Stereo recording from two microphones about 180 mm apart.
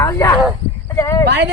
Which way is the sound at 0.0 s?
15° left (ahead or behind).